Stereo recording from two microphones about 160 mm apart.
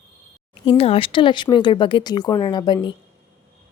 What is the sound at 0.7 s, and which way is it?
A woman's voice, 35° left (ahead or behind).